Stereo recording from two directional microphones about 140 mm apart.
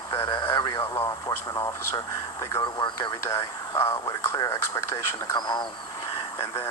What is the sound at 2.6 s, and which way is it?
Speech, 35° left (ahead or behind).